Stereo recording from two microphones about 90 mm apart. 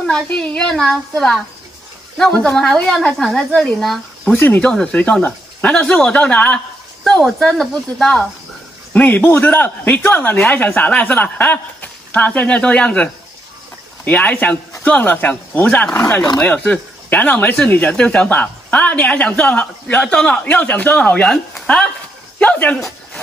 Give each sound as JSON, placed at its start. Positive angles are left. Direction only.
{"t": 0.0, "sound": "a woman's voice", "side_deg": 5}
{"t": 4.3, "sound": "speech", "side_deg": 20}
{"t": 8.9, "sound": "a man's voice", "side_deg": 20}